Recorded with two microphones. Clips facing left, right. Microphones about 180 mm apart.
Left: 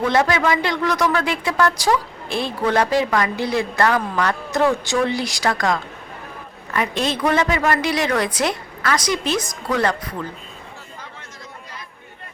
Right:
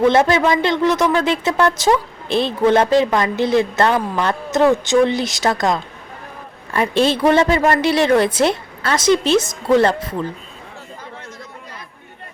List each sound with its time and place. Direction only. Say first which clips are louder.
0.1 s a woman's voice: right 4 dB; 25° right (ahead or behind)